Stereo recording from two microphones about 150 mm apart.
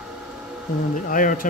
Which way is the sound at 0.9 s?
60° left (ahead or behind).